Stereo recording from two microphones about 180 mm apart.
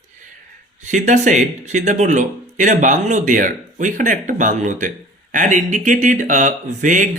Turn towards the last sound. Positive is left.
turn(degrees=-45)  # may be behind; listen again after turning